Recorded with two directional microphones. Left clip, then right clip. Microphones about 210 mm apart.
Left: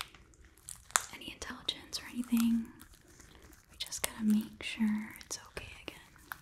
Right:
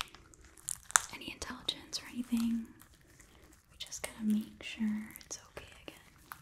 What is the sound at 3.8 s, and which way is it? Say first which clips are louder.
Whispering: left 4 dB; 20° left (ahead or behind).